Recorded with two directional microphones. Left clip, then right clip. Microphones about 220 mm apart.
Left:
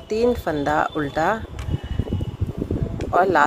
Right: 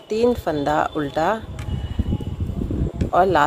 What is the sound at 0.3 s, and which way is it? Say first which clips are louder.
Speech: right 1 dB; 5° right (ahead or behind).